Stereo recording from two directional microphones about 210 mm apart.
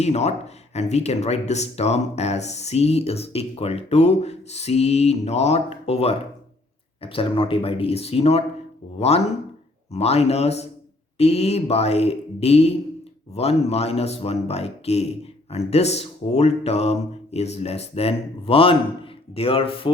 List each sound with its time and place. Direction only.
0.0 s speech: 30° left (ahead or behind)